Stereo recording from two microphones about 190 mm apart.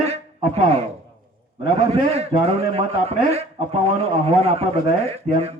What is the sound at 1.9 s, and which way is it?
A man's voice, 30° right (ahead or behind).